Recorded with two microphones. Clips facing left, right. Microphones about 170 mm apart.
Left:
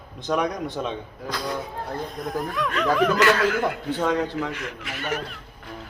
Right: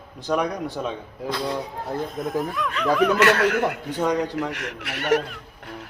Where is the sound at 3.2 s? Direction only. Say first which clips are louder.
Right 1 dB; 70° right (ahead or behind).